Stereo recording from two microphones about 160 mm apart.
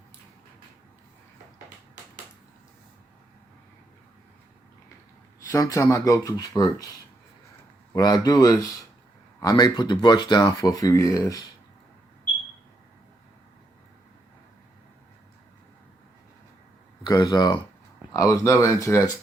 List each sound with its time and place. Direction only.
5.4 s speech: 20° left (ahead or behind)
7.9 s speech: 25° left (ahead or behind)
17.1 s speech: 25° left (ahead or behind)